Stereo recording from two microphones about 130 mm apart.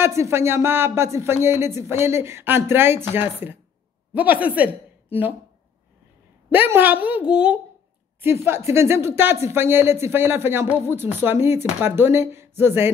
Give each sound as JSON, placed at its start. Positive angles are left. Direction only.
{"t": 0.0, "sound": "a woman's voice", "side_deg": -20}
{"t": 6.5, "sound": "a woman's voice", "side_deg": -15}
{"t": 8.2, "sound": "speech", "side_deg": -20}